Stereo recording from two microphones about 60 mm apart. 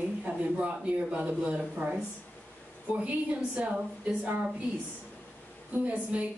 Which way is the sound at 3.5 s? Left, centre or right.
Centre.